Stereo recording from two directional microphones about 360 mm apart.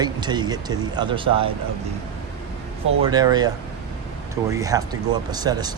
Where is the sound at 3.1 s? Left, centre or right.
Centre.